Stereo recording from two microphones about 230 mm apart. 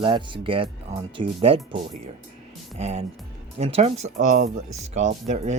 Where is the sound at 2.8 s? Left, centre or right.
Right.